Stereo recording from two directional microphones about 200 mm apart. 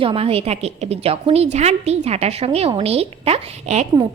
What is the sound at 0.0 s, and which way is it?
A woman's voice, 30° right (ahead or behind).